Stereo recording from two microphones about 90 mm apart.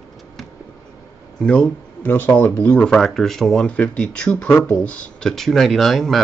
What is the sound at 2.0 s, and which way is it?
Speech, 20° left (ahead or behind).